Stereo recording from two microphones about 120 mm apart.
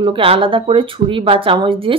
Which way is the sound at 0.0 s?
45° right (ahead or behind).